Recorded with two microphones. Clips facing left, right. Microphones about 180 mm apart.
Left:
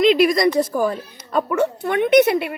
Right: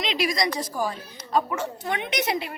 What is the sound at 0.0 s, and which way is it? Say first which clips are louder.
Speech: left 11 dB; 55° left (ahead or behind).